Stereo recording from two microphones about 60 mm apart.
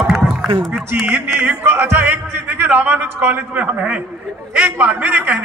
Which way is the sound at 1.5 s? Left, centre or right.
Right.